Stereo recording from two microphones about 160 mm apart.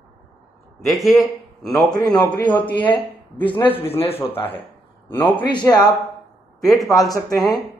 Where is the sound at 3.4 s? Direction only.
30° left (ahead or behind).